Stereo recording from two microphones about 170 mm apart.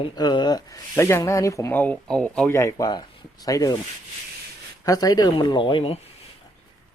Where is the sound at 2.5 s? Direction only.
20° left (ahead or behind).